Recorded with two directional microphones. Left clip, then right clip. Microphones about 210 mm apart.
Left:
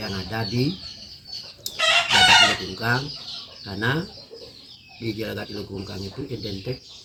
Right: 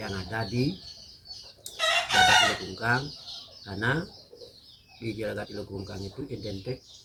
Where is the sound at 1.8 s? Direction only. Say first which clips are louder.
Left 5 dB; 60° right (ahead or behind).